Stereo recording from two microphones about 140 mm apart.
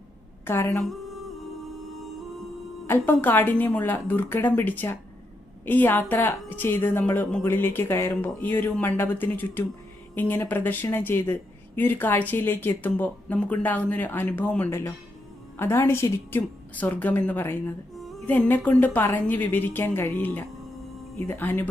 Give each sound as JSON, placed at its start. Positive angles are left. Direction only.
{"t": 0.4, "sound": "a woman's voice", "side_deg": 20}
{"t": 2.8, "sound": "speech", "side_deg": 15}